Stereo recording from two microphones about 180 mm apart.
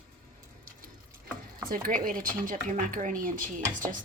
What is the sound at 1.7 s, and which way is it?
Speech, 50° right (ahead or behind).